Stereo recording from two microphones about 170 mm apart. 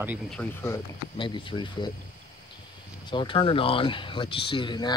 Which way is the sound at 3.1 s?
30° left (ahead or behind).